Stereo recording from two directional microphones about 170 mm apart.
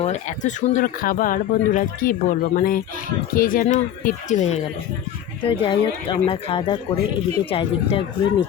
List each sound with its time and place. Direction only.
0.0 s speech: 45° left (ahead or behind)
3.8 s speech: 40° left (ahead or behind)